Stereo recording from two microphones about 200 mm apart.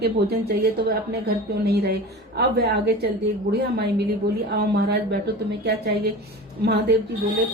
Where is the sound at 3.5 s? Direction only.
55° right (ahead or behind).